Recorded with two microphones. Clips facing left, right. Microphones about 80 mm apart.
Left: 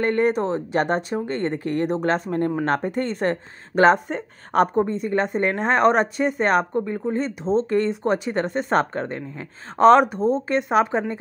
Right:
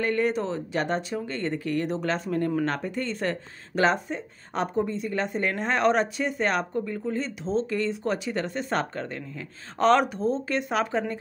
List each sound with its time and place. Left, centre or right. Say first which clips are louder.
0.0 s speech: left 5 dB; left
4.8 s speech: left 6 dB; left